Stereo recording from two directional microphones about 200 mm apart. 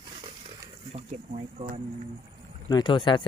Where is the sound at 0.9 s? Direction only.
30° right (ahead or behind).